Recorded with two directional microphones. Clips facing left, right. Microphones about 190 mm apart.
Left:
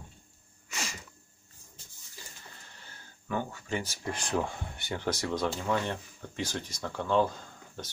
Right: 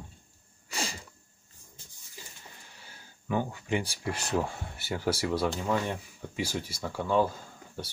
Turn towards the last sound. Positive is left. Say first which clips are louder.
# right 2 dB
turn(degrees=-5)  # may be behind; listen again after turning